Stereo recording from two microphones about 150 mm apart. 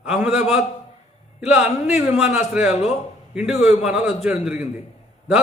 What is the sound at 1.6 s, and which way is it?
Speech, centre (ahead or behind).